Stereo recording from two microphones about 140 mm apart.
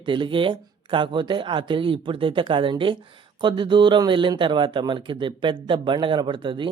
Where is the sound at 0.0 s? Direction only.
35° right (ahead or behind).